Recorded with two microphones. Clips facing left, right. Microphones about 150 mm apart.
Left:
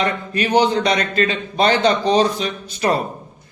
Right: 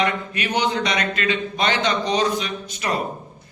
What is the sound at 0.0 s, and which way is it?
A man's voice, 35° left (ahead or behind).